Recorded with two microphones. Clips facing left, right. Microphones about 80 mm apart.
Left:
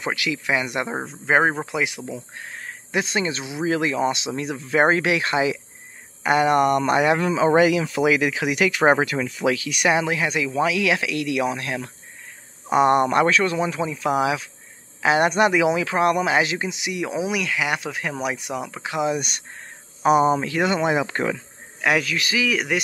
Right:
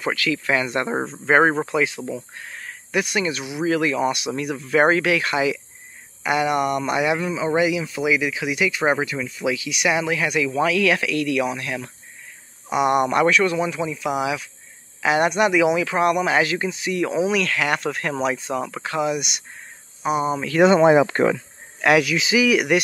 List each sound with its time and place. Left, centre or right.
0.0 s speech: centre
2.3 s speech: left
7.2 s speech: left
9.9 s speech: left
19.0 s speech: left
20.0 s cricket: left
20.6 s speech: centre
20.9 s speech: right
22.0 s a man's voice: centre